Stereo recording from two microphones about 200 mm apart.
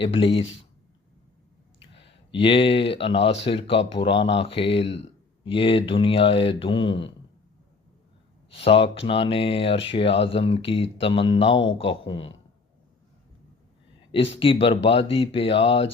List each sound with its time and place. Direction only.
0.0 s speech: 25° left (ahead or behind)
1.8 s a sound: 25° left (ahead or behind)
2.4 s speech: 25° left (ahead or behind)
8.5 s speech: 30° left (ahead or behind)
14.3 s speech: 25° left (ahead or behind)